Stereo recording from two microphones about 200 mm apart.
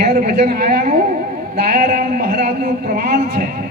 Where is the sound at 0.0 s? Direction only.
50° right (ahead or behind).